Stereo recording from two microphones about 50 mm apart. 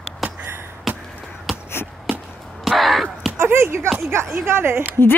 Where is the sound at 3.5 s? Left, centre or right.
Right.